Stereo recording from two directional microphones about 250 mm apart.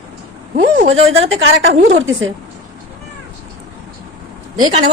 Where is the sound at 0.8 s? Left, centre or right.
Right.